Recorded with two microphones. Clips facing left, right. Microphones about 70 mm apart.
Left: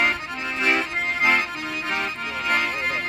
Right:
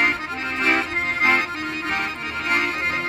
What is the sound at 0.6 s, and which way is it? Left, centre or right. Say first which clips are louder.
Accordion: right 1 dB; right.